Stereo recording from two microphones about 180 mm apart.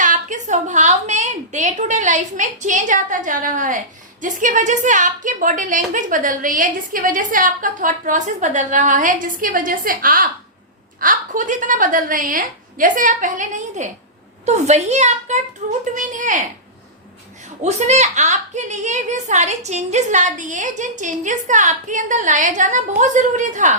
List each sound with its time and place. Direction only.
0.0 s a woman's voice: 45° right (ahead or behind)
17.6 s a woman's voice: 40° right (ahead or behind)